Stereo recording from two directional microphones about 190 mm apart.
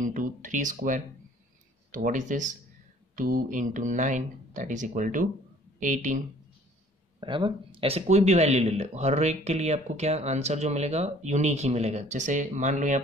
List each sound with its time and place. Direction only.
0.0 s speech: 45° right (ahead or behind)
7.2 s speech: 25° right (ahead or behind); by 13.0 s 40° right (ahead or behind)